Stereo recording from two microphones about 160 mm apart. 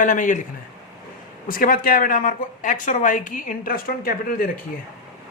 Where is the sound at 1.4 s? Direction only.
60° left (ahead or behind).